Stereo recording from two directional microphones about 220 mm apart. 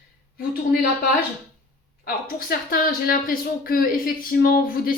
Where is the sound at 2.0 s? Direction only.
45° left (ahead or behind).